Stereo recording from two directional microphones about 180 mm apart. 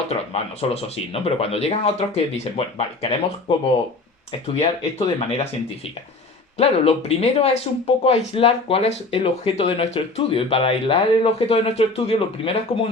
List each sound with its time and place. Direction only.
0.1 s speech: 35° left (ahead or behind)
4.3 s speech: 35° left (ahead or behind)
6.6 s speech: 35° left (ahead or behind)